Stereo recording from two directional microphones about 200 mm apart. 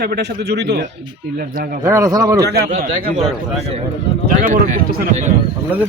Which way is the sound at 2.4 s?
55° right (ahead or behind).